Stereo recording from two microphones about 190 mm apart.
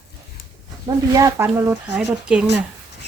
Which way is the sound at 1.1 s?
15° right (ahead or behind).